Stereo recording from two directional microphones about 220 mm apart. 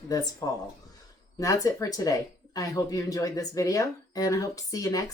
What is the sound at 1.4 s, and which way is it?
Speech, 15° left (ahead or behind).